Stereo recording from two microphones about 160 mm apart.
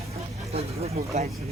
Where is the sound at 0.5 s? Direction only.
40° right (ahead or behind).